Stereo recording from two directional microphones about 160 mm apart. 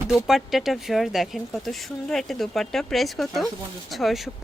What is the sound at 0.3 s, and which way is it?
Speech, centre (ahead or behind).